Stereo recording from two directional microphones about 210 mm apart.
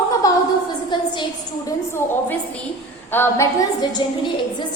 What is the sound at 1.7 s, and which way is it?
A woman's voice, 10° left (ahead or behind).